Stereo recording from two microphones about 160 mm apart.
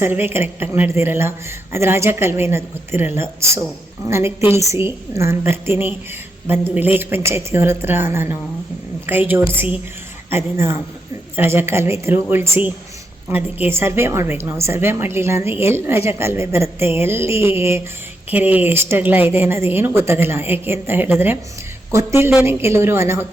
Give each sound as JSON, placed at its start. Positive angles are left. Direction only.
{"t": 0.0, "sound": "a woman's voice", "side_deg": -15}